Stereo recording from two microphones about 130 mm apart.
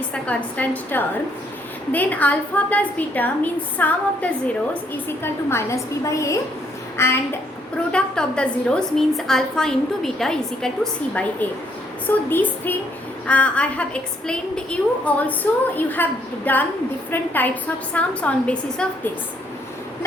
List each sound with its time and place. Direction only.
0.1 s a woman's voice: 10° left (ahead or behind)
7.9 s a woman's voice: 5° left (ahead or behind)